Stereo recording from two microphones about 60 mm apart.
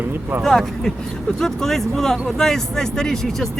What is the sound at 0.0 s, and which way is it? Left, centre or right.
Speech, right.